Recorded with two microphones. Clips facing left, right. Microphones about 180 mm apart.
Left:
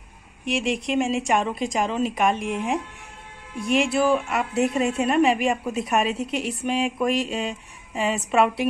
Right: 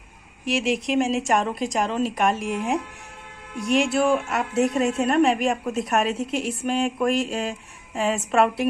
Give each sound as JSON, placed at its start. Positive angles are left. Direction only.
{"t": 0.5, "sound": "a woman's voice", "side_deg": 0}